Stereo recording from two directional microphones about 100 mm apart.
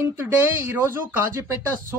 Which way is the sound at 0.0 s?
20° right (ahead or behind).